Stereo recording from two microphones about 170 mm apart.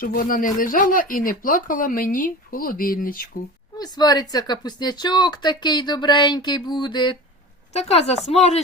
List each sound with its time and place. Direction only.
0.0 s speech: 55° left (ahead or behind)
3.8 s speech: 20° left (ahead or behind)
7.7 s a woman's voice: 40° left (ahead or behind)